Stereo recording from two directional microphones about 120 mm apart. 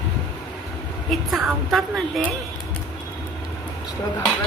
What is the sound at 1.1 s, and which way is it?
A woman's voice, centre (ahead or behind).